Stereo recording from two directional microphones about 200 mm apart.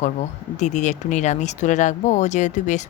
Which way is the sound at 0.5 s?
35° left (ahead or behind).